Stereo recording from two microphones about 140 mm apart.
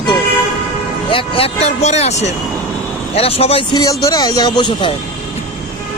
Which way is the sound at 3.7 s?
25° left (ahead or behind).